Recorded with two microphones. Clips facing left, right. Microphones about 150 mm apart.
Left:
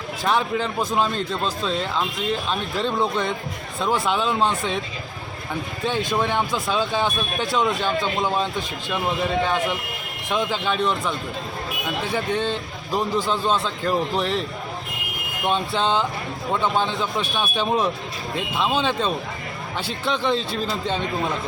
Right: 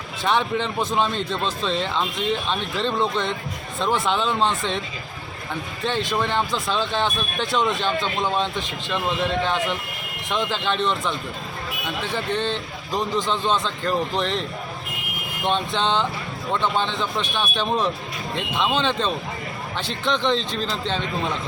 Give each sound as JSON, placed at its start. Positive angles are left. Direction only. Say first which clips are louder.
{"t": 0.3, "sound": "a man's voice", "louder": "even", "side_deg": 5}
{"t": 5.8, "sound": "a man's voice", "louder": "left 1 dB", "side_deg": 10}
{"t": 15.4, "sound": "a man's voice", "louder": "left 1 dB", "side_deg": 5}